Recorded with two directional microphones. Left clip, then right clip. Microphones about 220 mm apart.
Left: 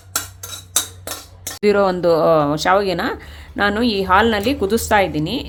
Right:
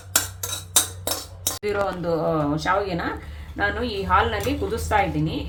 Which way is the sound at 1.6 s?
50° left (ahead or behind).